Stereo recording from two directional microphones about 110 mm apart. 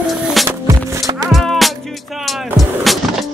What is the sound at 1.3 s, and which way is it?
Music, centre (ahead or behind).